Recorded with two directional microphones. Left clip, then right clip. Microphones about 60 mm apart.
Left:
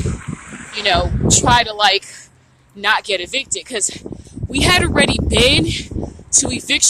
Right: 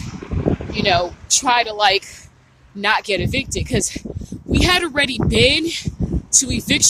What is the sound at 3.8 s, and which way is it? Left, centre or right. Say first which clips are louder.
Speech: even; right.